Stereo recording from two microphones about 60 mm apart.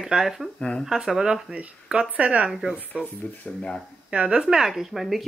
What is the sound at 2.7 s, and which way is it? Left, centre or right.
Speech, left.